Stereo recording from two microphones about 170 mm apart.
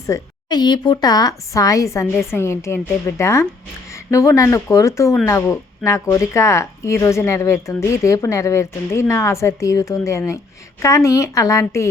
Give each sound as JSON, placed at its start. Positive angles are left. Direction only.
{"t": 0.0, "sound": "speech", "side_deg": 20}